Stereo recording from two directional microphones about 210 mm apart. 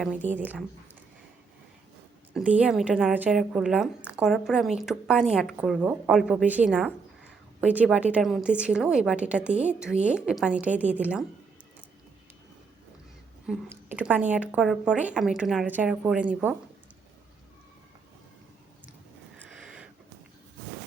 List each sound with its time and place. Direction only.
0.3 s a woman's voice: 10° right (ahead or behind)
2.3 s speech: 5° right (ahead or behind)
13.5 s a woman's voice: 5° right (ahead or behind)
19.4 s a sound: 5° right (ahead or behind)